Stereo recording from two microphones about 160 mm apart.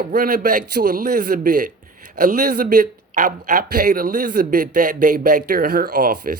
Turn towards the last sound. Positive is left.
turn(degrees=-60)  # may be behind; listen again after turning